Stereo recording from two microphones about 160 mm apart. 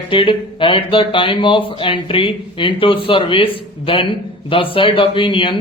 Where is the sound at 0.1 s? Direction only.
35° left (ahead or behind).